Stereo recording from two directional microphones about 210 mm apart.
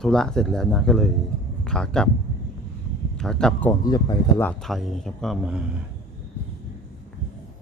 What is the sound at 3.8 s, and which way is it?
Speech, 20° left (ahead or behind).